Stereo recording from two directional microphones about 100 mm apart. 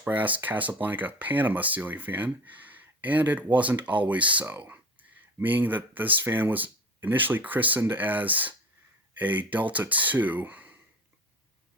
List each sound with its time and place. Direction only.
0.0 s speech: 15° right (ahead or behind)